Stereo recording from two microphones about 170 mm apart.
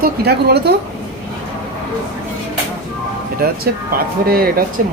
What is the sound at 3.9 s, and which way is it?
Speech, 60° right (ahead or behind).